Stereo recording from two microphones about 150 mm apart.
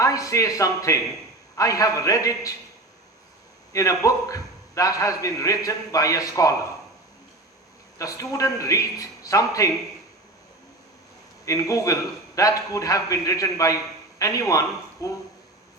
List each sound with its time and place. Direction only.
0.0 s a man's voice: 20° left (ahead or behind)
3.7 s a man's voice: 20° left (ahead or behind)
7.9 s a man's voice: 20° left (ahead or behind)
11.4 s a man's voice: 20° left (ahead or behind)